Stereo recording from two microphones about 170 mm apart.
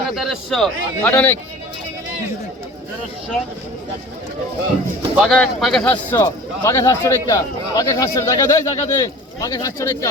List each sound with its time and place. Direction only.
0.1 s speech: centre (ahead or behind)
5.1 s speech: centre (ahead or behind); by 10.1 s 20° left (ahead or behind)